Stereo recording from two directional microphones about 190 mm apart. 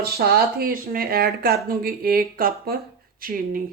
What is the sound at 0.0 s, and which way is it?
Speech, 55° right (ahead or behind).